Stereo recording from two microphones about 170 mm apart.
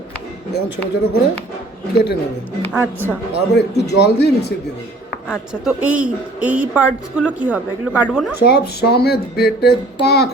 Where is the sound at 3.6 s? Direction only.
75° left (ahead or behind).